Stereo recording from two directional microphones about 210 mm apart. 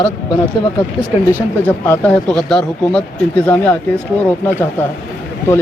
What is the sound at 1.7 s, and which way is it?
Speech, 10° left (ahead or behind).